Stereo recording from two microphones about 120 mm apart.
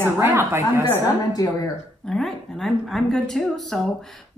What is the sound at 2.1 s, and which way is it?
A woman's voice, 5° left (ahead or behind).